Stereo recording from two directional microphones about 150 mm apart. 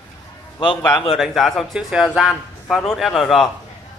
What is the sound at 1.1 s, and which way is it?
A man's voice, centre (ahead or behind).